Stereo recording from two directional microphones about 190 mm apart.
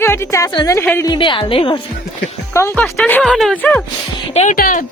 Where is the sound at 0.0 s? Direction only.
15° left (ahead or behind).